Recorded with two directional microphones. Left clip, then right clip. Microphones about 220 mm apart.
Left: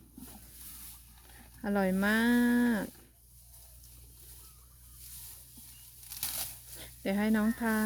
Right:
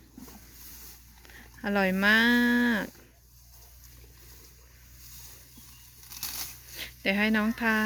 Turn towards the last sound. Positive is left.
turn(degrees=10)  # may be behind; listen again after turning